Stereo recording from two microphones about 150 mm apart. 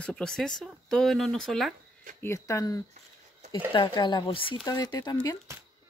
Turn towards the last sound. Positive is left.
turn(degrees=25)  # may be behind; listen again after turning